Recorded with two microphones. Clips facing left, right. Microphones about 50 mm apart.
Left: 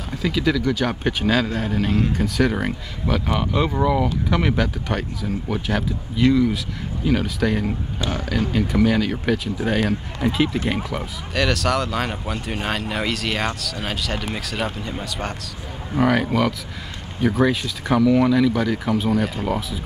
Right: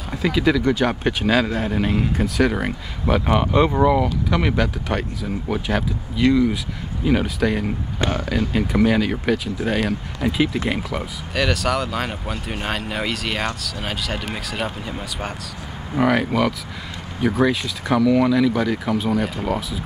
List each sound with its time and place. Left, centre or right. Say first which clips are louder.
0.1 s speech: right 2 dB; centre
3.3 s speech: right 6 dB; centre
4.0 s speech: even; centre
8.0 s speech: right 4 dB; right
8.5 s speech: right 1 dB; centre